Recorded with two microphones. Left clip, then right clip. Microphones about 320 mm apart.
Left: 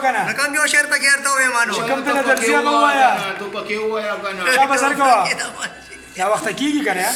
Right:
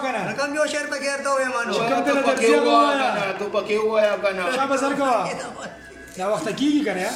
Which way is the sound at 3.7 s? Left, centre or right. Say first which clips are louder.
Right 2 dB; right.